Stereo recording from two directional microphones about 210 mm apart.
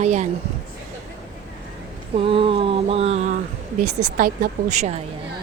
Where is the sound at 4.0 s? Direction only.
50° right (ahead or behind); by 5.0 s 35° right (ahead or behind).